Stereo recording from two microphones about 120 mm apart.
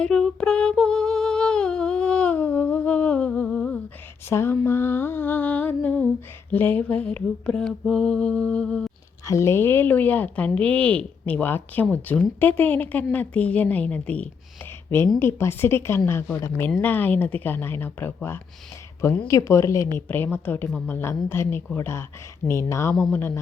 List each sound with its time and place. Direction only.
0.0 s humming: 5° left (ahead or behind)
4.3 s mantra: 20° left (ahead or behind)
6.5 s speech: 15° left (ahead or behind)
9.2 s a woman's voice: 25° left (ahead or behind)